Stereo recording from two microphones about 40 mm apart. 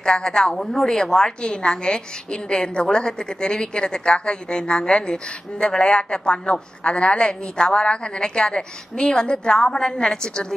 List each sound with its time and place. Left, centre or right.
0.0 s a woman's voice: centre